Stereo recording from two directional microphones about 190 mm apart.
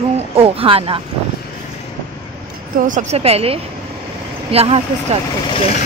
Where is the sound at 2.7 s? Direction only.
45° right (ahead or behind).